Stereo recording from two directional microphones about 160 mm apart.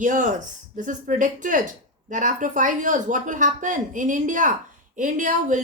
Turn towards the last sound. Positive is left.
turn(degrees=-50)  # may be behind; listen again after turning